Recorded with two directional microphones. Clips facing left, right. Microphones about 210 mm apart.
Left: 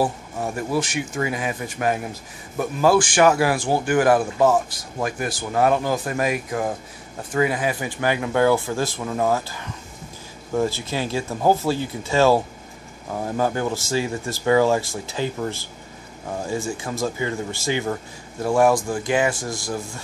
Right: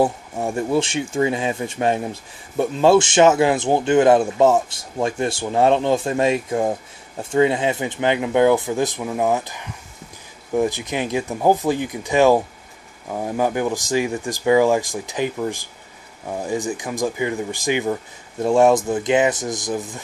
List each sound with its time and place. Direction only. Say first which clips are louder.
0.0 s a man's voice: right 4 dB; 25° right (ahead or behind)